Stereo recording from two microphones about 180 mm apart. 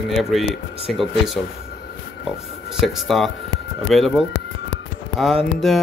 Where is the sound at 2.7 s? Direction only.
Centre (ahead or behind).